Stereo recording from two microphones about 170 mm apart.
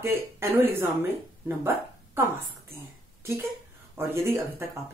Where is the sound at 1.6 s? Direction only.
15° right (ahead or behind).